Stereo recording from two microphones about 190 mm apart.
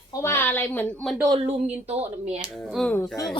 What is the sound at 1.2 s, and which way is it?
Speech, 20° right (ahead or behind).